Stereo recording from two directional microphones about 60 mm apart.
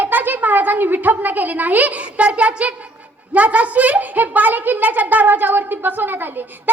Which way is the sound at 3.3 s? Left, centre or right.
Right.